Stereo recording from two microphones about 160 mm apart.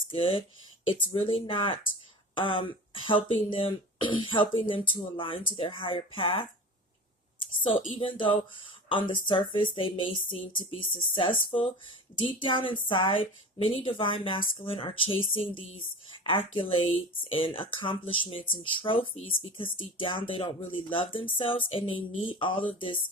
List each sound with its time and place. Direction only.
0.1 s a woman's voice: 35° left (ahead or behind)
7.6 s a woman's voice: 35° left (ahead or behind)